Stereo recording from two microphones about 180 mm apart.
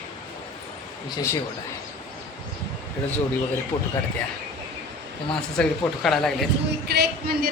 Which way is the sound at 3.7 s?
35° left (ahead or behind).